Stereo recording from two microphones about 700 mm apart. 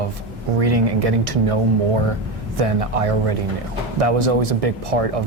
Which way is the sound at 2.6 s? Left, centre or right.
Right.